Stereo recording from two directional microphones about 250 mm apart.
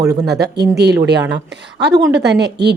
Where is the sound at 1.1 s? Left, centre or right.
Right.